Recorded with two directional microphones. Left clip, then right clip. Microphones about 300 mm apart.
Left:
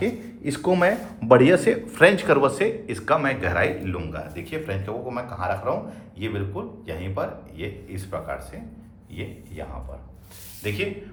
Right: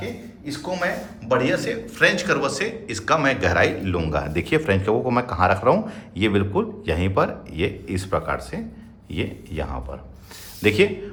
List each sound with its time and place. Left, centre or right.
0.4 s speech: centre; by 10.8 s right